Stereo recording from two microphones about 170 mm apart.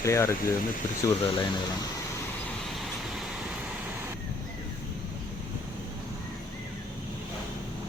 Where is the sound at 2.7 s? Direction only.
Centre (ahead or behind).